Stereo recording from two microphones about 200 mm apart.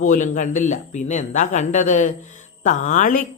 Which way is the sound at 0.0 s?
40° left (ahead or behind).